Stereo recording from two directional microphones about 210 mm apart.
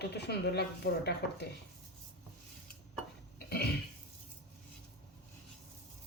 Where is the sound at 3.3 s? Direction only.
50° left (ahead or behind).